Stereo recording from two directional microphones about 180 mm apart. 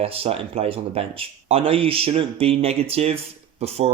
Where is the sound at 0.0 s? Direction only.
30° right (ahead or behind).